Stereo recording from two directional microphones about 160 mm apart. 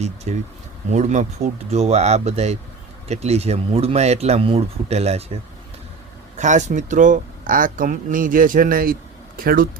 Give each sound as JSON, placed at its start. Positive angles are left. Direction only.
{"t": 0.3, "sound": "speech", "side_deg": -45}
{"t": 6.3, "sound": "speech", "side_deg": -50}